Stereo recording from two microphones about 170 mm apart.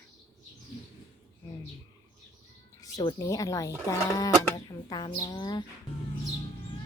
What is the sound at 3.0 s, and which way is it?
Speech, 20° left (ahead or behind).